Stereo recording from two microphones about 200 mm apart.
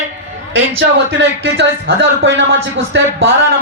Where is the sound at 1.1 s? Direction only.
65° right (ahead or behind).